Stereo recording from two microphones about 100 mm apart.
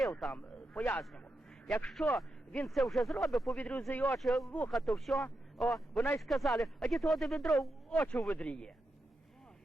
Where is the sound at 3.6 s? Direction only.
15° left (ahead or behind).